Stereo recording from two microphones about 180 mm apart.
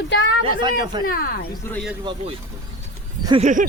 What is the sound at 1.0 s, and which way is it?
Speech, 55° left (ahead or behind).